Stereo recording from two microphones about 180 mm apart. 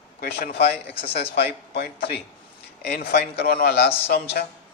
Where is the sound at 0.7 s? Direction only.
30° left (ahead or behind).